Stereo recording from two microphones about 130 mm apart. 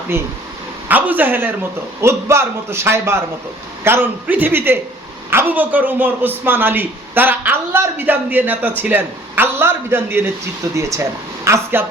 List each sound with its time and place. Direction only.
0.1 s a man's voice: 20° right (ahead or behind)